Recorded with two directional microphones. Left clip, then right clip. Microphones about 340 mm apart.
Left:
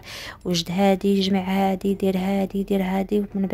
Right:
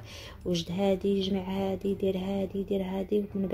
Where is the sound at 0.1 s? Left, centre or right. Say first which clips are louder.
Left 6 dB; left.